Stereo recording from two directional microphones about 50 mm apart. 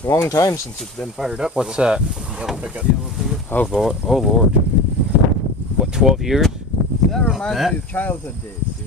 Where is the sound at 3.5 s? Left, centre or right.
Left.